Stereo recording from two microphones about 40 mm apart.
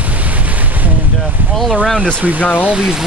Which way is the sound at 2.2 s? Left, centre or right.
Right.